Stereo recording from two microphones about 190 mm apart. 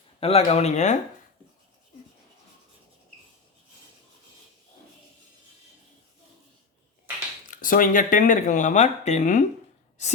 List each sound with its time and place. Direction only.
0.2 s speech: 30° left (ahead or behind)
7.4 s speech: 45° left (ahead or behind)